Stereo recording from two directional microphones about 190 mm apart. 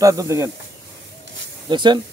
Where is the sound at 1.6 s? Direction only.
25° right (ahead or behind).